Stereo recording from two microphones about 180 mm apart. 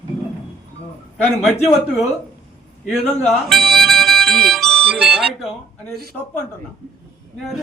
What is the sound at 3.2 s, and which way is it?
Harmonica, centre (ahead or behind).